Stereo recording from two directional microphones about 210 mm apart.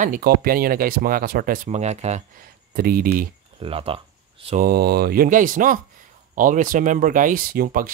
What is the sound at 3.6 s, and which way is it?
Speech, 25° right (ahead or behind).